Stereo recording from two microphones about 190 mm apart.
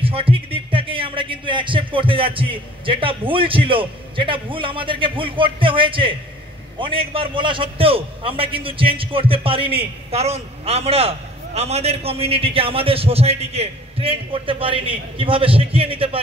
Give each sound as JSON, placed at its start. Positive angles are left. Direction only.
{"t": 0.0, "sound": "a man's voice", "side_deg": -30}